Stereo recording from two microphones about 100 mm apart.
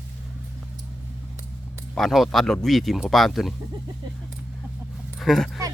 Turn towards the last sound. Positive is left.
turn(degrees=5)  # may be behind; listen again after turning